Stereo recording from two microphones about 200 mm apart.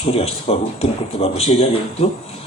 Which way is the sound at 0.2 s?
30° left (ahead or behind).